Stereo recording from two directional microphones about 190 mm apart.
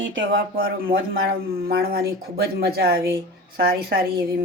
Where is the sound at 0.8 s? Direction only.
55° right (ahead or behind).